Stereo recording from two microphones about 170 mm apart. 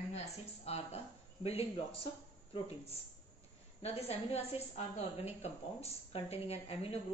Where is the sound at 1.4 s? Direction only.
35° left (ahead or behind).